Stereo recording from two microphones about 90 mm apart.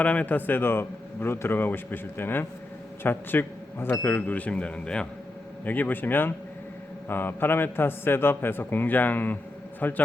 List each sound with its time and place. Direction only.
0.0 s a man's voice: 15° left (ahead or behind)